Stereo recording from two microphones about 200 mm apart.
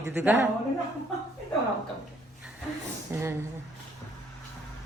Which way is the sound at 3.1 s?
15° right (ahead or behind).